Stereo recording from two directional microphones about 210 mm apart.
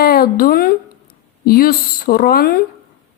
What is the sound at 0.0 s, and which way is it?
Speech, 45° left (ahead or behind).